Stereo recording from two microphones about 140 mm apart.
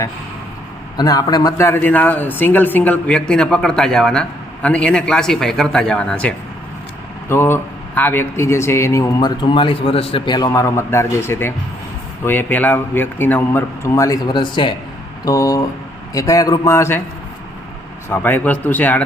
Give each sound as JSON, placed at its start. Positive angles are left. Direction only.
{"t": 0.9, "sound": "speech", "side_deg": 30}
{"t": 18.1, "sound": "speech", "side_deg": 15}